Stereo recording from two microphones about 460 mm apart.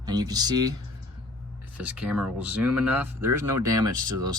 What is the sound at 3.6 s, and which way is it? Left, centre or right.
Speech, right.